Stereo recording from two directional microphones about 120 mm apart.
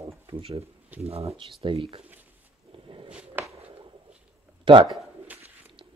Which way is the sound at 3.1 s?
10° right (ahead or behind).